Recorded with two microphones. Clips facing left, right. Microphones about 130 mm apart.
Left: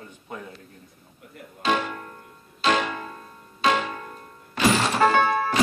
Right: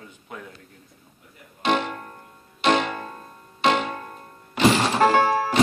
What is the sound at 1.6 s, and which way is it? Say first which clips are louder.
Speech: right 1 dB; 20° right (ahead or behind).